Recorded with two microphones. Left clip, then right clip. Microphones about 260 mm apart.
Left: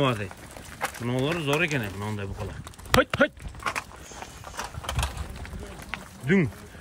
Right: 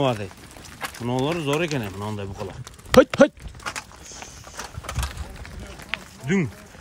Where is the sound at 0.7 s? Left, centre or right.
Centre.